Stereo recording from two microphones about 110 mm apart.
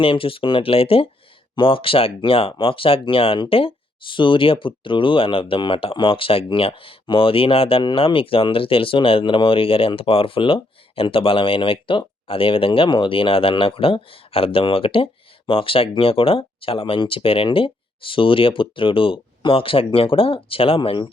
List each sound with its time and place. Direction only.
0.0 s speech: 55° left (ahead or behind)